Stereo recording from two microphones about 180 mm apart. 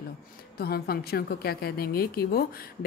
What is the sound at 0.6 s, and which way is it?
A woman's voice, 60° left (ahead or behind).